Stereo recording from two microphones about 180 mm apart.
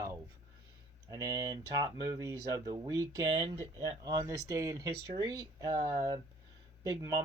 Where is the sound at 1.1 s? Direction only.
20° right (ahead or behind).